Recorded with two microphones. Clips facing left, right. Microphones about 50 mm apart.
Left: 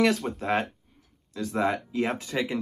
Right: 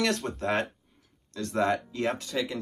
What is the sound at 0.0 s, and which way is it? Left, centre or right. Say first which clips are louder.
Speech: left 4 dB; centre.